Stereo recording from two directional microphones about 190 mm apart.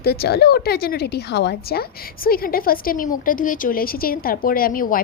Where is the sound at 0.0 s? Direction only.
55° left (ahead or behind).